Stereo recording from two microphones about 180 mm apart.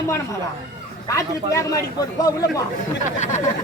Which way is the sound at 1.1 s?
15° left (ahead or behind).